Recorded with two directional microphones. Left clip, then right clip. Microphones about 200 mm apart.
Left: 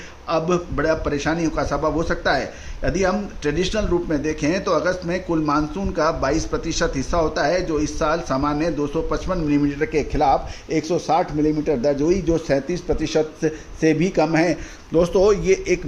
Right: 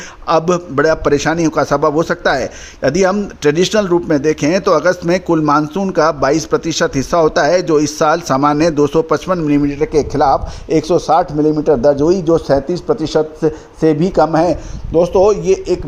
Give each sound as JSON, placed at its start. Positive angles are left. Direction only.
{"t": 0.3, "sound": "a man's voice", "side_deg": -55}
{"t": 9.6, "sound": "a man's voice", "side_deg": -30}
{"t": 13.8, "sound": "speech", "side_deg": -25}
{"t": 14.9, "sound": "a man's voice", "side_deg": -10}